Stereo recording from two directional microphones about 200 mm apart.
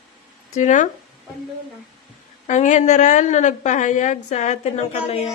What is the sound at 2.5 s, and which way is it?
A woman's voice, 35° left (ahead or behind).